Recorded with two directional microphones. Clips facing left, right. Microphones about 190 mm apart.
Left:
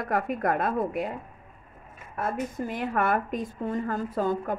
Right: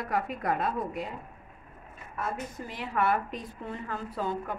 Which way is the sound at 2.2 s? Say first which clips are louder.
Left 5 dB; 50° left (ahead or behind).